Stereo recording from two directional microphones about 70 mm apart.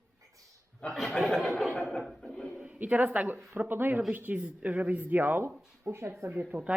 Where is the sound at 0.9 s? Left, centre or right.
Centre.